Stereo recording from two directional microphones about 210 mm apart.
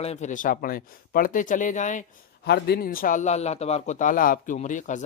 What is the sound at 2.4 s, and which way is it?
Speech, 50° left (ahead or behind).